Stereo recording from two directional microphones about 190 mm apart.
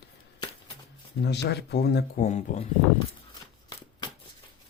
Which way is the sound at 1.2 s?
60° left (ahead or behind).